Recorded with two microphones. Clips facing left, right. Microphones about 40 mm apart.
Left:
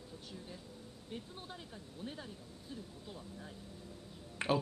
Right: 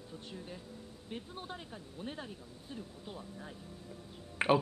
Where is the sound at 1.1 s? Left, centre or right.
Right.